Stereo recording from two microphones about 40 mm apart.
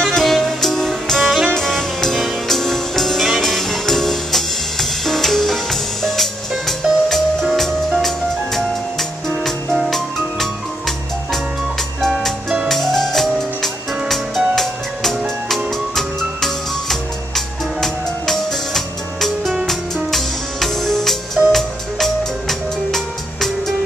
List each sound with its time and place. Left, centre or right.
0.0 s music: centre
6.8 s music: centre
7.5 s music: centre
9.8 s music: centre
12.6 s music: centre